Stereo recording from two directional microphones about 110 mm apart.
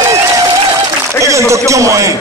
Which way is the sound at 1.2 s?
25° right (ahead or behind).